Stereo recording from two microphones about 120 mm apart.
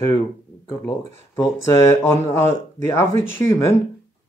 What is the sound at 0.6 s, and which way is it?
Speech, 20° left (ahead or behind).